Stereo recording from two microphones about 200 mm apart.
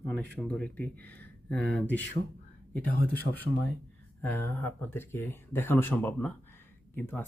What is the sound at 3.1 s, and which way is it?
Speech, 10° left (ahead or behind).